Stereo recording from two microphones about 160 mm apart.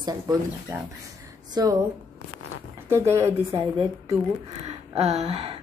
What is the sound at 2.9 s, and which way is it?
Speech, 20° right (ahead or behind).